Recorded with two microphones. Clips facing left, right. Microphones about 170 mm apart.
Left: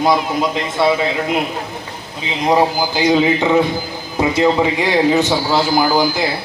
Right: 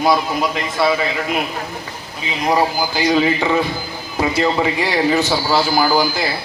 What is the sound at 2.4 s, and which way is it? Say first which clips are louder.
A man's voice: left 3 dB; 20° left (ahead or behind).